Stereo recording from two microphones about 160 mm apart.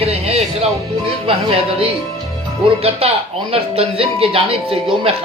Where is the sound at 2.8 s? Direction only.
40° right (ahead or behind).